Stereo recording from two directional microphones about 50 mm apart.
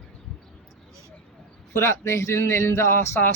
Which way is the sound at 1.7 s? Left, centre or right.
Left.